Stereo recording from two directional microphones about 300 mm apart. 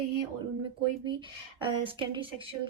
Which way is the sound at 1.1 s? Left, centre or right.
Centre.